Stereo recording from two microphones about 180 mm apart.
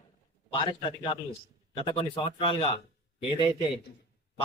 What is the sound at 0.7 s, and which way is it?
A man's voice, 25° left (ahead or behind).